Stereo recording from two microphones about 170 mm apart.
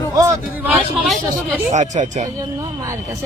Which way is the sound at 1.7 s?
45° right (ahead or behind).